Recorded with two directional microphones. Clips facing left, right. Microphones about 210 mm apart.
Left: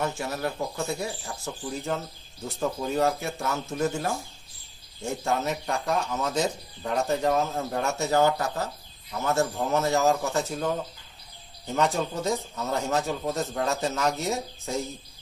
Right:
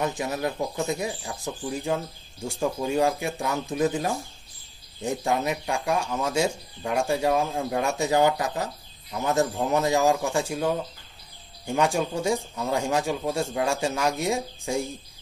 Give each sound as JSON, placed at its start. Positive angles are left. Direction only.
{"t": 0.0, "sound": "speech", "side_deg": -15}